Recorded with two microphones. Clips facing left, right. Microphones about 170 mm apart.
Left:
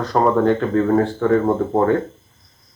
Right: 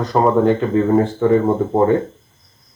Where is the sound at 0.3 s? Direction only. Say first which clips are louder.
Right 2 dB; 10° right (ahead or behind).